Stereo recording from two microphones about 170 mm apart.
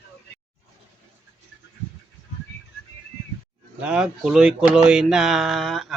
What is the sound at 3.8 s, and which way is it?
Speech, 5° right (ahead or behind).